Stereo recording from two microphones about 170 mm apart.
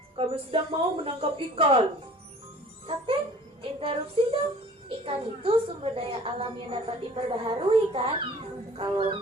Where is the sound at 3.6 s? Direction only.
35° right (ahead or behind).